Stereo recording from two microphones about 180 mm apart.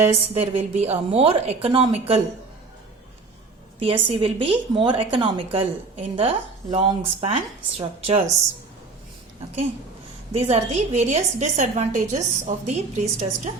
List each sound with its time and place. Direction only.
0.3 s a woman's voice: 35° right (ahead or behind)
3.8 s a woman's voice: 30° right (ahead or behind)
10.3 s a woman's voice: 35° right (ahead or behind)